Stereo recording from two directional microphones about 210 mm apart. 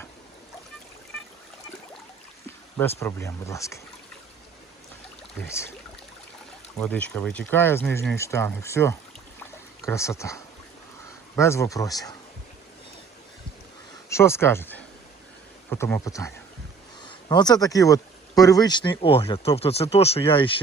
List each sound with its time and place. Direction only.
3.0 s speech: 15° left (ahead or behind)
5.5 s speech: 15° left (ahead or behind)
6.7 s speech: 5° left (ahead or behind)
9.4 s a sound: 15° left (ahead or behind)
11.3 s speech: 15° left (ahead or behind)
14.1 s speech: 10° left (ahead or behind)